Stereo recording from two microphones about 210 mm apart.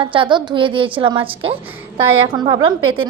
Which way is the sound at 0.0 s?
25° right (ahead or behind).